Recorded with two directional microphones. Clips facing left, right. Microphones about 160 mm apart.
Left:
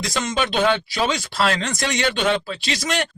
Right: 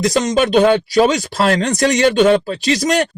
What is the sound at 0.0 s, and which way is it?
Speech, 40° right (ahead or behind).